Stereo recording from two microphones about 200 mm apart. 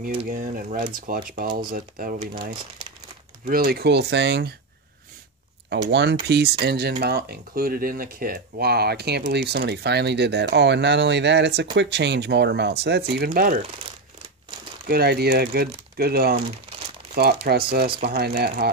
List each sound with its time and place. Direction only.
0.2 s speech: 40° right (ahead or behind)
3.4 s speech: 50° right (ahead or behind)
5.7 s speech: 60° right (ahead or behind)
14.9 s speech: 50° right (ahead or behind)